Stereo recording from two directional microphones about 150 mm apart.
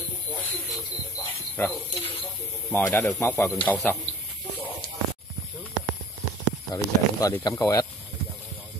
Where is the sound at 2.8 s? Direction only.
15° left (ahead or behind).